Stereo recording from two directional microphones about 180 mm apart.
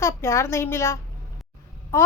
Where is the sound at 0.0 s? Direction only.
15° left (ahead or behind).